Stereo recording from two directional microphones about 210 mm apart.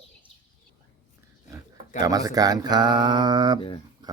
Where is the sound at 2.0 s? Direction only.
15° right (ahead or behind).